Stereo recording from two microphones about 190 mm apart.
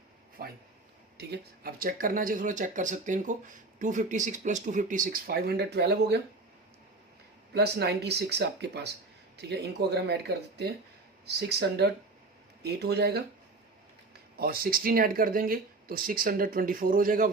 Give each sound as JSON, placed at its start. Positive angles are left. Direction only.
{"t": 0.4, "sound": "speech", "side_deg": -50}
{"t": 7.5, "sound": "speech", "side_deg": -60}
{"t": 14.3, "sound": "speech", "side_deg": -50}